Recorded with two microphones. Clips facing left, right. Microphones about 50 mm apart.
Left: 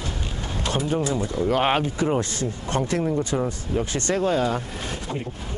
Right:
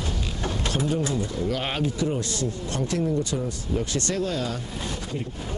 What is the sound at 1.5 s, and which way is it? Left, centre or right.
Speech, left.